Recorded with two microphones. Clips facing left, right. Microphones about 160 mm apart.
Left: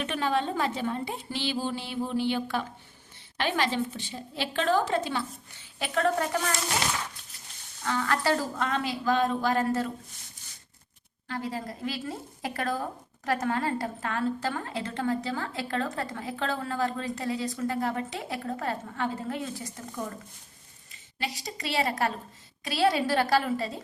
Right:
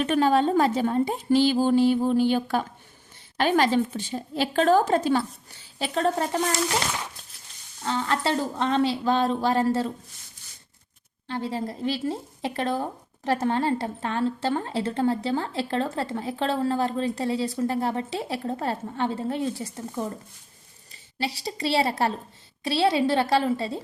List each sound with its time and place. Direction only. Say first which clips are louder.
0.0 s a woman's voice: right 7 dB; 40° right (ahead or behind)
7.9 s a woman's voice: right 1 dB; 25° right (ahead or behind)
11.3 s a woman's voice: right 4 dB; 25° right (ahead or behind)